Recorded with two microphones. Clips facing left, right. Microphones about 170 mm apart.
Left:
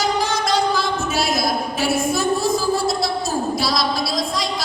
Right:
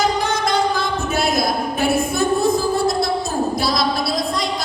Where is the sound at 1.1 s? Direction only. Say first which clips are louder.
Right 3 dB; 55° right (ahead or behind).